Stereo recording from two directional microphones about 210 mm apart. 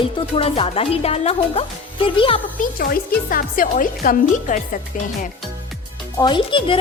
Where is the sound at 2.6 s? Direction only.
45° left (ahead or behind).